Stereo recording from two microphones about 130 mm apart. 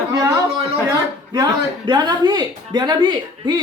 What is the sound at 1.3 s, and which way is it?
Speech, 35° right (ahead or behind).